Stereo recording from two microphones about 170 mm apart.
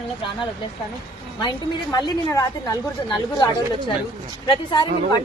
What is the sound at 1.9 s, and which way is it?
A woman's voice, 20° left (ahead or behind).